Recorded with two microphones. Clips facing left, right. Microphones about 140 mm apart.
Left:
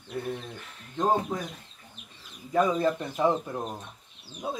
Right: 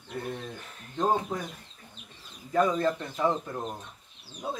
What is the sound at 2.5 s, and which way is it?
Speech, 10° left (ahead or behind).